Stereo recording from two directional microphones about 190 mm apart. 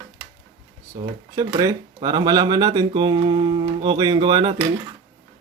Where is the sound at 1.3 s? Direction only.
20° right (ahead or behind).